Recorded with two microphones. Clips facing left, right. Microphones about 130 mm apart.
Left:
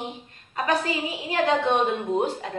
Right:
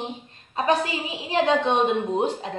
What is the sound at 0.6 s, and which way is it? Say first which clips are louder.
A woman's voice: right 2 dB; 25° right (ahead or behind).